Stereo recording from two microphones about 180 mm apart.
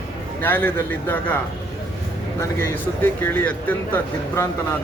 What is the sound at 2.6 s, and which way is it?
Speech, 10° left (ahead or behind).